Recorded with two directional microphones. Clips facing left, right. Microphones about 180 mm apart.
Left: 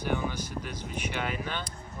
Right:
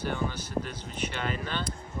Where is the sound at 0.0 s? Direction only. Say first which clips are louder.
Left 1 dB; 10° left (ahead or behind).